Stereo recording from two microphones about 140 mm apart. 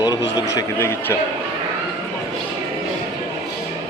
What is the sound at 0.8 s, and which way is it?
Speech, 15° left (ahead or behind).